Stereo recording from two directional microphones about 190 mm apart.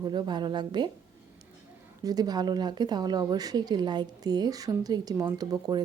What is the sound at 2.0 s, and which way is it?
A woman's voice, 20° right (ahead or behind).